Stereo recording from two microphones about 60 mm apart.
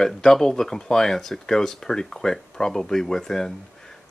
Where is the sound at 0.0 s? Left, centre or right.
Centre.